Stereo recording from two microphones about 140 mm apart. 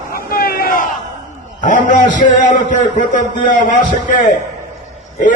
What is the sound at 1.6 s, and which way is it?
A man's voice, 65° left (ahead or behind).